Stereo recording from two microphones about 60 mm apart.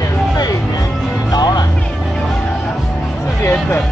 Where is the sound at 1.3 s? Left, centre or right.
Left.